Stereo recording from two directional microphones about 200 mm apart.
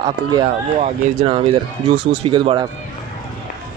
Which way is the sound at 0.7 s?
30° right (ahead or behind).